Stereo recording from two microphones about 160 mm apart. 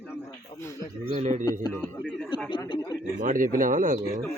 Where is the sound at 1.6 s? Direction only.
25° left (ahead or behind).